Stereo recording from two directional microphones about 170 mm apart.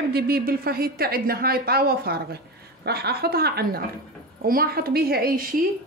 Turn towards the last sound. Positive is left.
turn(degrees=-55)  # may be behind; listen again after turning